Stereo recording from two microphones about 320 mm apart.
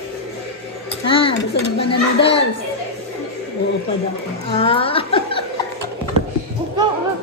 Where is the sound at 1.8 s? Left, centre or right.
Centre.